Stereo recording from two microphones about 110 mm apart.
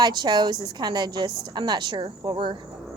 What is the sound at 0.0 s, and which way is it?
A woman's voice, 40° right (ahead or behind).